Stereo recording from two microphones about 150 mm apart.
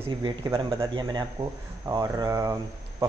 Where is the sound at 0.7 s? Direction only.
30° right (ahead or behind).